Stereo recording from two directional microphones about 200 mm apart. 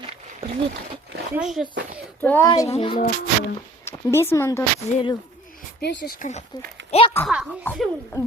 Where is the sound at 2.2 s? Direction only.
10° left (ahead or behind).